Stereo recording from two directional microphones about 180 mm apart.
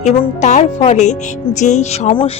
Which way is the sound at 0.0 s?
40° left (ahead or behind).